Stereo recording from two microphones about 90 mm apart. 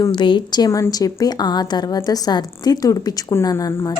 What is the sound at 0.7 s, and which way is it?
A woman's voice, 40° left (ahead or behind).